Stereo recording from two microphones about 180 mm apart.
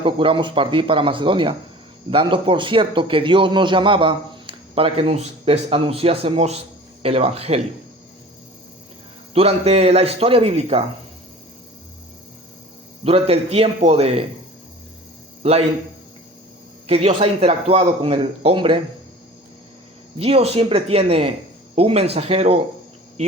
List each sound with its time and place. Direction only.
0.0 s a man's voice: 30° right (ahead or behind)
9.3 s a man's voice: 35° right (ahead or behind)
13.1 s a man's voice: 35° right (ahead or behind)
16.8 s a man's voice: 35° right (ahead or behind)
20.1 s a man's voice: 35° right (ahead or behind)